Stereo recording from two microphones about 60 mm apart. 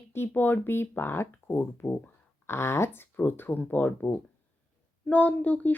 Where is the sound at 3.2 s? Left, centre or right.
Left.